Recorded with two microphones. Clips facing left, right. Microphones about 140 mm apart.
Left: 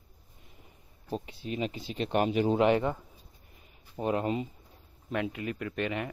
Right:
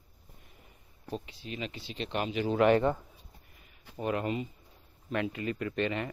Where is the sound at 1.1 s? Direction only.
40° left (ahead or behind).